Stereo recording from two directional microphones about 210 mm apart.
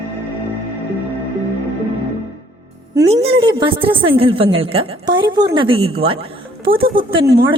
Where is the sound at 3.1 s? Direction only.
25° right (ahead or behind).